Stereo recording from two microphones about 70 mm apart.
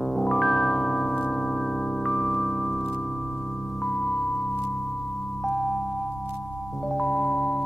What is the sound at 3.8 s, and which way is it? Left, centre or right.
Music, centre.